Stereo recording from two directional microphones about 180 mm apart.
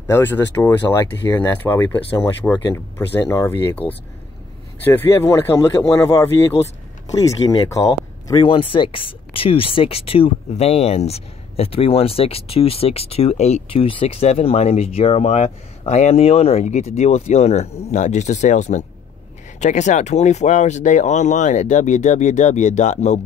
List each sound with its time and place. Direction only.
0.1 s speech: 10° left (ahead or behind); by 23.2 s 40° left (ahead or behind)